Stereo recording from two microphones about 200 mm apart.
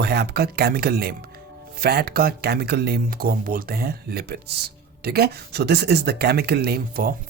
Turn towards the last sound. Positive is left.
turn(degrees=-50)  # may be behind; listen again after turning